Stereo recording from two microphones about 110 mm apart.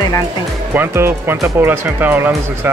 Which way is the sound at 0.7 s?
20° right (ahead or behind).